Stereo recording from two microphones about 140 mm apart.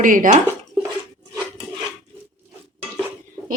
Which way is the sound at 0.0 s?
75° right (ahead or behind).